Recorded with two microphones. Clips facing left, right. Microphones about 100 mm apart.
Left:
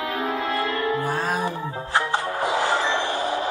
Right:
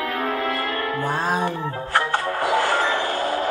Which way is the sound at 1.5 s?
60° right (ahead or behind).